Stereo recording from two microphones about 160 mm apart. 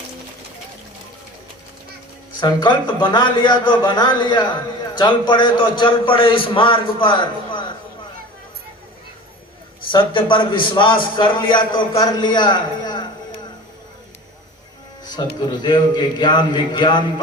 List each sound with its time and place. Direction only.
2.4 s a man's voice: 30° left (ahead or behind)
9.9 s a man's voice: 30° left (ahead or behind)
15.0 s music: 25° left (ahead or behind)
15.4 s a man's voice: 25° left (ahead or behind)